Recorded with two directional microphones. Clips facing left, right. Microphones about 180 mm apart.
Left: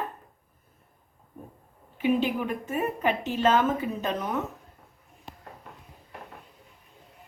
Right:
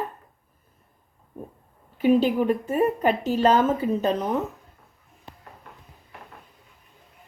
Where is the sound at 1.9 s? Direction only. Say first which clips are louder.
Right 6 dB; 40° right (ahead or behind).